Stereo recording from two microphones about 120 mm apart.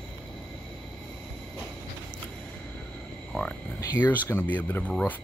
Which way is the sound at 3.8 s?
20° left (ahead or behind).